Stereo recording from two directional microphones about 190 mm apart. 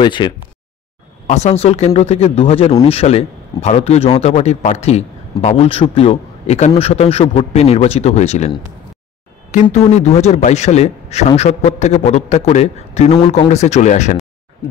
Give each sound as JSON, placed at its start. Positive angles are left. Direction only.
{"t": 0.0, "sound": "speech", "side_deg": 25}
{"t": 1.2, "sound": "a man's voice", "side_deg": 35}
{"t": 9.5, "sound": "a man's voice", "side_deg": 40}